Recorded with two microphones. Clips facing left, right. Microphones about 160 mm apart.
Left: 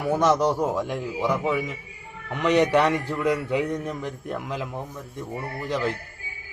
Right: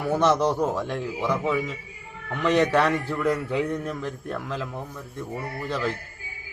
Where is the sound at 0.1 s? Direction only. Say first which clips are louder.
Left 1 dB; 10° left (ahead or behind).